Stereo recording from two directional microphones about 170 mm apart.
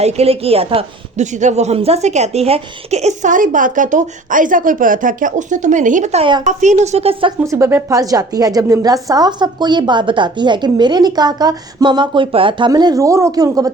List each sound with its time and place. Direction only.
0.0 s a woman's voice: 35° right (ahead or behind)
7.4 s a woman's voice: 15° right (ahead or behind)